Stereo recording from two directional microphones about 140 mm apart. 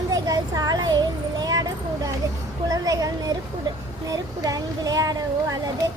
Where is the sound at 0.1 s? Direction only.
25° right (ahead or behind).